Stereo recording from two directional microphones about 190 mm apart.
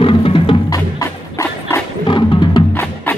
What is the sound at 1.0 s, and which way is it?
Music, 15° left (ahead or behind).